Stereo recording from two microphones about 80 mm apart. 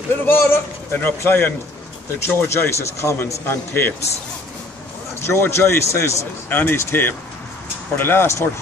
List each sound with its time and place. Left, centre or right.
0.3 s speech: left
5.2 s speech: left
6.5 s speech: left